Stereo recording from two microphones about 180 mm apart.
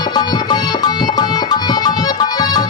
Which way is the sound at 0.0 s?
25° left (ahead or behind).